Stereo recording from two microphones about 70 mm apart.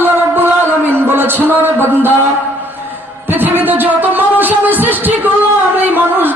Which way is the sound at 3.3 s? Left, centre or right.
Right.